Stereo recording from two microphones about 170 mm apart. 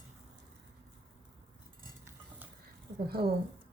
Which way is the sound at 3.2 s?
65° right (ahead or behind).